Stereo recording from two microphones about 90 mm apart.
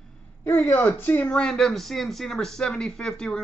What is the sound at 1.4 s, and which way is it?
Speech, 5° left (ahead or behind).